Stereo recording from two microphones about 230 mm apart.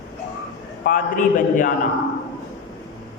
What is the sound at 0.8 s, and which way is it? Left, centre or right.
Speech, left.